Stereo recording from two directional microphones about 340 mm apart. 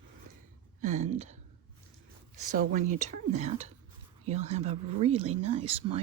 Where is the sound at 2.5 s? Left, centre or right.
Right.